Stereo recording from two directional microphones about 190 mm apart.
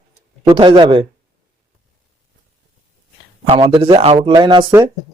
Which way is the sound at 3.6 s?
25° right (ahead or behind).